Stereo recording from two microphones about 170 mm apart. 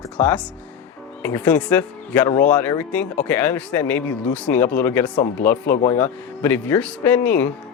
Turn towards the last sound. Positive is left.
turn(degrees=10)  # may be behind; listen again after turning